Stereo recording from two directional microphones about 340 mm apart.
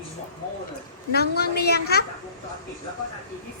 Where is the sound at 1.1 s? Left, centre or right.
Left.